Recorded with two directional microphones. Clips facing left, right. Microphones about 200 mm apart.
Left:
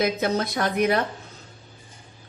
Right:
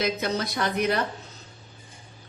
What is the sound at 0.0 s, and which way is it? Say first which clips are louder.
Speech: left 3 dB; 50° left (ahead or behind).